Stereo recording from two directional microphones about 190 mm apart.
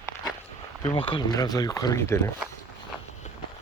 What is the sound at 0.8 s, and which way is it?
Speech, 25° left (ahead or behind).